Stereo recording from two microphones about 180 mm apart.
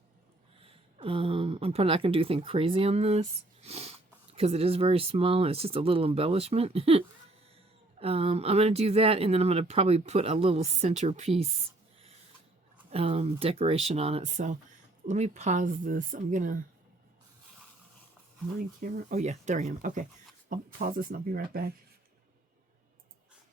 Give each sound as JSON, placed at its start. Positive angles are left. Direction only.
{"t": 0.6, "sound": "speech", "side_deg": -30}
{"t": 12.9, "sound": "speech", "side_deg": -35}
{"t": 18.8, "sound": "speech", "side_deg": -45}